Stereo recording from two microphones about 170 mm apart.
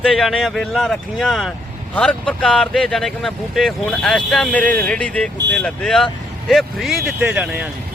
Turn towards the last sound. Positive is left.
turn(degrees=-5)  # may be behind; listen again after turning